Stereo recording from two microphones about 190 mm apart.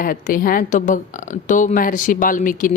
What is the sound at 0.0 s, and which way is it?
Speech, 50° left (ahead or behind).